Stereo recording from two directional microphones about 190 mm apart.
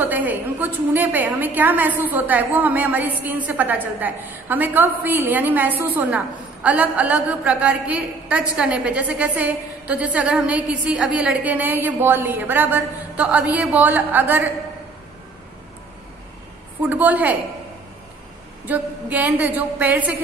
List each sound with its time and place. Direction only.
0.0 s a woman's voice: 10° right (ahead or behind)
16.9 s a woman's voice: 10° right (ahead or behind)
18.7 s a woman's voice: 10° right (ahead or behind)